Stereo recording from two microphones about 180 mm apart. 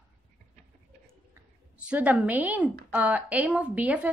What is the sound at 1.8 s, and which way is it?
Speech, 5° right (ahead or behind).